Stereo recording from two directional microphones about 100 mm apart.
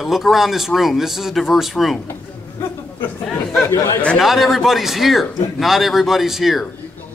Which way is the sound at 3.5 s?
30° left (ahead or behind).